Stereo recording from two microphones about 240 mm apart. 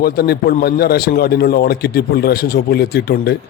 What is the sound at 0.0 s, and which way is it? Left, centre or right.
A man's voice, left.